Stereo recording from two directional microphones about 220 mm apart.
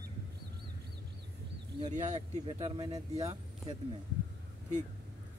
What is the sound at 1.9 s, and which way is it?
Speech, 30° right (ahead or behind).